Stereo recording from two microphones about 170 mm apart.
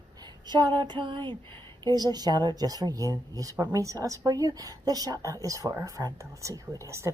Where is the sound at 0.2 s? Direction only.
25° right (ahead or behind).